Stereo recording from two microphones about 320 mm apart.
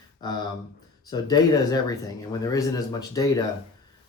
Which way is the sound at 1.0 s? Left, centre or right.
Centre.